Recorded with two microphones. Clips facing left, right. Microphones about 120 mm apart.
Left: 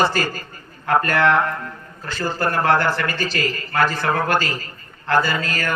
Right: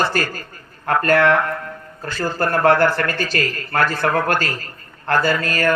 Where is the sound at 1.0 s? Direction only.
60° right (ahead or behind).